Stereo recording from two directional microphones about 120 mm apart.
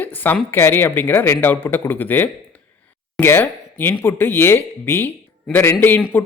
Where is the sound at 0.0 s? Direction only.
15° left (ahead or behind).